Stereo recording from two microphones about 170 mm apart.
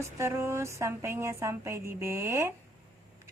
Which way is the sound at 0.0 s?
15° right (ahead or behind).